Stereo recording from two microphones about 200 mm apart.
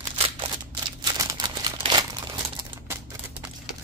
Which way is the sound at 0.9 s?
20° right (ahead or behind).